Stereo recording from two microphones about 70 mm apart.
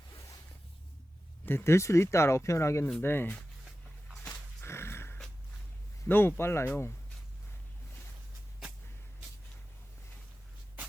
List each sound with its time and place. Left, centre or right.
1.5 s speech: left
3.0 s speech: left
4.2 s dog: left
4.7 s a sound: left
6.1 s speech: left